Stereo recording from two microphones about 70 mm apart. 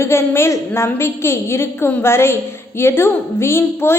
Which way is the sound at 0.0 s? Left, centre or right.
Left.